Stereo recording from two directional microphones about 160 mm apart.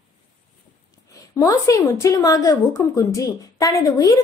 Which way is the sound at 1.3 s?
20° left (ahead or behind).